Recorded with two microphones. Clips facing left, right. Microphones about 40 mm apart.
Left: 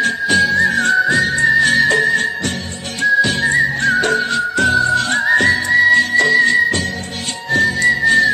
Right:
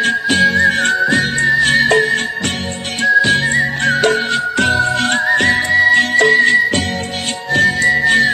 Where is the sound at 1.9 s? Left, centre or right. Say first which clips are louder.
Right 1 dB; right.